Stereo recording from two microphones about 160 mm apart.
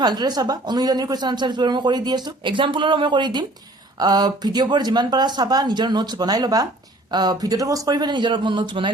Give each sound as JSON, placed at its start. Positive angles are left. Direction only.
{"t": 0.0, "sound": "speech", "side_deg": -25}